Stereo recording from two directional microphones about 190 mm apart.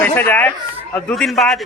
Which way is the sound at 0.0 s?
10° left (ahead or behind).